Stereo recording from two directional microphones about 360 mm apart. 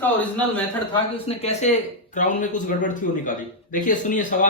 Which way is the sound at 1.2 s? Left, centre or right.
Centre.